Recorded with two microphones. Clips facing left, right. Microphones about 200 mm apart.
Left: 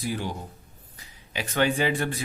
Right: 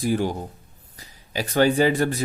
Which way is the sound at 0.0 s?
45° right (ahead or behind).